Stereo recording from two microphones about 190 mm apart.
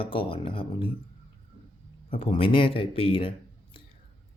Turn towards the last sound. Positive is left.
turn(degrees=25)  # may be behind; listen again after turning